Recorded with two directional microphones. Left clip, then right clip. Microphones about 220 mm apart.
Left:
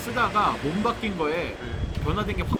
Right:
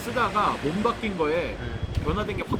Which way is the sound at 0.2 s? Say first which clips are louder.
Left 1 dB; 20° left (ahead or behind).